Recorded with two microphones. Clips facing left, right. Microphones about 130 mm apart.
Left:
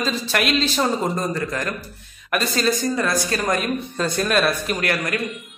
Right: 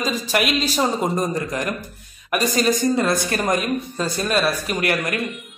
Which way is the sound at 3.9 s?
5° right (ahead or behind).